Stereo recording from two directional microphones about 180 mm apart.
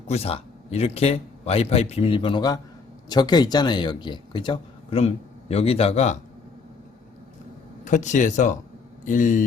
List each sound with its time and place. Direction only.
0.1 s a man's voice: 35° left (ahead or behind)
7.9 s speech: 45° left (ahead or behind)